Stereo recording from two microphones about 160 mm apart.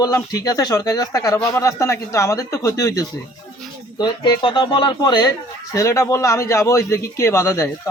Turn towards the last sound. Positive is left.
turn(degrees=20)  # may be behind; listen again after turning